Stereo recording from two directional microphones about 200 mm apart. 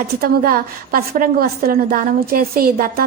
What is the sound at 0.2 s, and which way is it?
A woman's voice, 45° right (ahead or behind).